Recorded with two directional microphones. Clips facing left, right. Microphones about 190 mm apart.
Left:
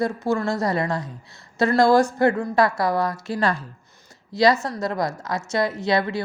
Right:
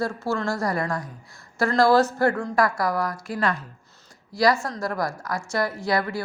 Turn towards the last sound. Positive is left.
turn(degrees=20)  # may be behind; listen again after turning